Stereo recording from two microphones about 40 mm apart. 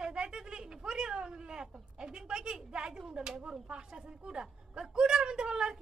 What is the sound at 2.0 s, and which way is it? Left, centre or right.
A woman's voice, right.